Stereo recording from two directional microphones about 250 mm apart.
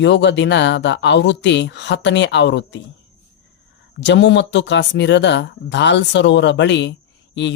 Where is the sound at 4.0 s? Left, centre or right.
Left.